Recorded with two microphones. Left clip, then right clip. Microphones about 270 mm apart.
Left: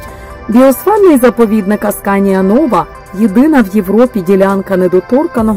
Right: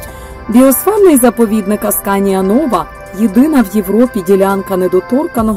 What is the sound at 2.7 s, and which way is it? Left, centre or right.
Speech, centre.